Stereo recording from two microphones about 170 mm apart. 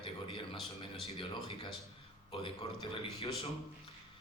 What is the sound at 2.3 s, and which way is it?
A man's voice, 30° left (ahead or behind).